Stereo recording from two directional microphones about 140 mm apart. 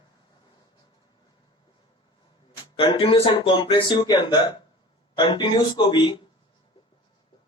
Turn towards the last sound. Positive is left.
turn(degrees=35)  # may be behind; listen again after turning